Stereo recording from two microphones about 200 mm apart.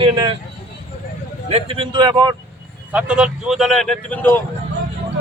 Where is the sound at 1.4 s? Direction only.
30° right (ahead or behind).